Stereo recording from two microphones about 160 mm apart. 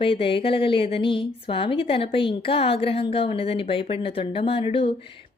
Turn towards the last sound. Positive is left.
turn(degrees=35)  # may be behind; listen again after turning